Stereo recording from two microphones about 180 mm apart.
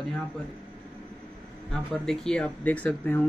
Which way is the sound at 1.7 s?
5° left (ahead or behind).